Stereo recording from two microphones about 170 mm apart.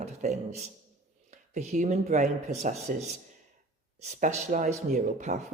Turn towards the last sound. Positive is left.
turn(degrees=-45)  # may be behind; listen again after turning